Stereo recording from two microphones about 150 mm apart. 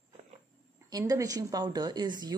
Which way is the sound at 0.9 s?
25° right (ahead or behind).